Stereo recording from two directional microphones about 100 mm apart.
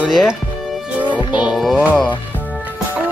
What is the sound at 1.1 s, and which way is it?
Music, 50° left (ahead or behind).